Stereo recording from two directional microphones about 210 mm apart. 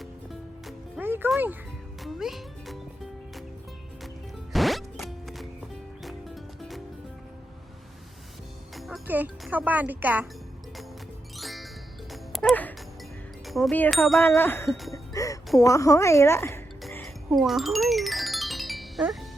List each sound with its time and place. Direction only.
0.0 s music: centre (ahead or behind)
2.0 s speech: centre (ahead or behind)
4.5 s zipper: centre (ahead or behind)
6.0 s music: centre (ahead or behind)
8.7 s speech: centre (ahead or behind)
11.3 s music: centre (ahead or behind)
14.2 s a woman's voice: 10° left (ahead or behind)
14.9 s music: 15° left (ahead or behind)
15.5 s a woman's voice: 15° left (ahead or behind)
16.8 s music: centre (ahead or behind)